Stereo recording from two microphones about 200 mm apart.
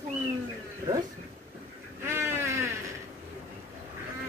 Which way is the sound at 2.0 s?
10° right (ahead or behind).